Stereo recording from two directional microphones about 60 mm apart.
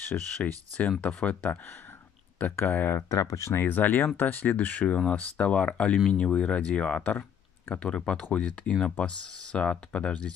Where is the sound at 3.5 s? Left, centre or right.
Left.